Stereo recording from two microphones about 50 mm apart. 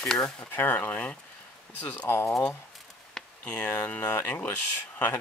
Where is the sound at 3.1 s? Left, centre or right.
Left.